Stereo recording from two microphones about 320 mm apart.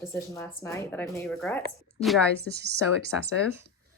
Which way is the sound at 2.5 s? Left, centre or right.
Right.